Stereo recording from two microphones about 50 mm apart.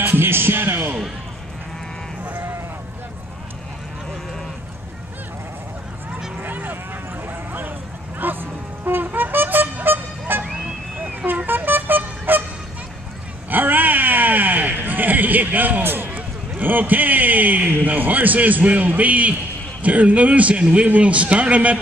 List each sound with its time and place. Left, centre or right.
0.0 s music: right
2.2 s sheep: right
6.4 s a sound: right
8.2 s music: right
9.8 s vehicle: right
13.5 s a sound: right
19.8 s a man's voice: right